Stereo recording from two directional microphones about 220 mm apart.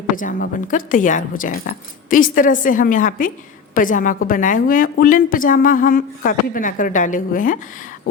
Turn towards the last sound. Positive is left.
turn(degrees=35)  # may be behind; listen again after turning